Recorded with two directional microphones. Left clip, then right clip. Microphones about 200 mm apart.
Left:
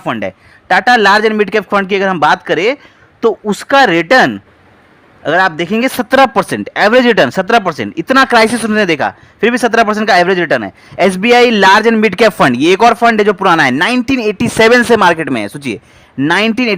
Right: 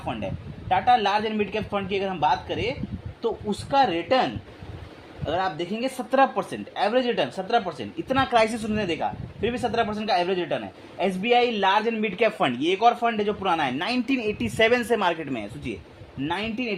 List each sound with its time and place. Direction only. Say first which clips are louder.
0.0 s a man's voice: left 13 dB; 55° left (ahead or behind)